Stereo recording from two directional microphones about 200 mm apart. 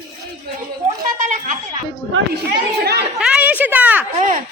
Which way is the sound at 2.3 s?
55° right (ahead or behind).